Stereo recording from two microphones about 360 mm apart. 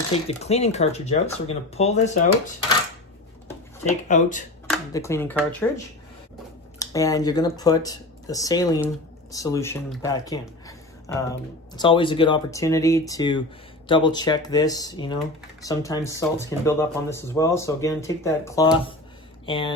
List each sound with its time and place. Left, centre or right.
0.1 s speech: centre
4.1 s speech: left
4.7 s speech: centre